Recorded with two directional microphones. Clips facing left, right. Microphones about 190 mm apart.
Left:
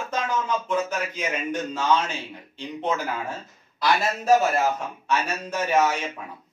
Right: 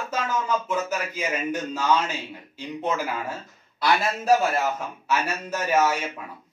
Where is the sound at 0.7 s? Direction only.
5° right (ahead or behind).